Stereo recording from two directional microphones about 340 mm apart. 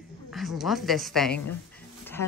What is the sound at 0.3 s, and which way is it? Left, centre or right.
A woman's voice, centre.